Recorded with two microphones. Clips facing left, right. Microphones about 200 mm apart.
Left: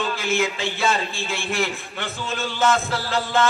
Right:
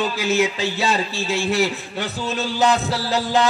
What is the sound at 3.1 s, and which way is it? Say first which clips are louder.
Music: right 2 dB; 15° right (ahead or behind).